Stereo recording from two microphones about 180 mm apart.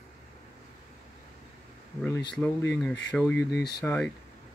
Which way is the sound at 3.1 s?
5° left (ahead or behind).